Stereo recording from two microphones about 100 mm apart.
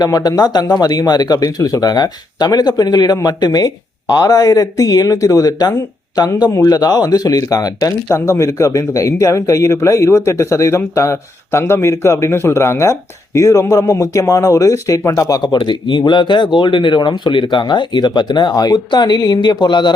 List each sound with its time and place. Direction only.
0.0 s speech: 40° left (ahead or behind)